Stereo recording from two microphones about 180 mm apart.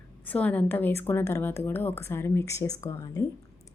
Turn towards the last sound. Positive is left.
turn(degrees=20)  # may be behind; listen again after turning